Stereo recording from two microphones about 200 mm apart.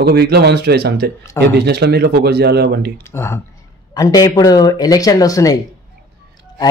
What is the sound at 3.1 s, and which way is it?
Speech, 15° left (ahead or behind).